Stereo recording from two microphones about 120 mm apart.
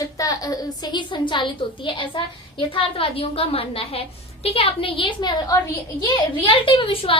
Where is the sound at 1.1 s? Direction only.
40° left (ahead or behind).